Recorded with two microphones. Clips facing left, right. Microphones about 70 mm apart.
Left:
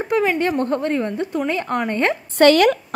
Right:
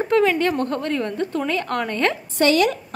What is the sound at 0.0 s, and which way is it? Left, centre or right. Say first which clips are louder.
A woman's voice: right 1 dB; centre.